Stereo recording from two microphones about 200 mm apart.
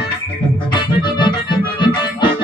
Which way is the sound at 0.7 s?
25° left (ahead or behind).